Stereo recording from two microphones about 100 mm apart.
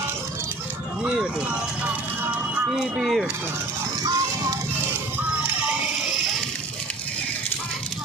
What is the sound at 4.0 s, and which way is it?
Music, 35° right (ahead or behind).